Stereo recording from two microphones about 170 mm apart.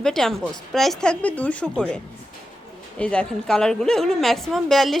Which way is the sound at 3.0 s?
5° left (ahead or behind).